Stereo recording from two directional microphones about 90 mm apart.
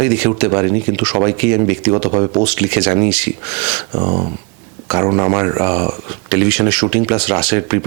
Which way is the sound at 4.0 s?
30° right (ahead or behind).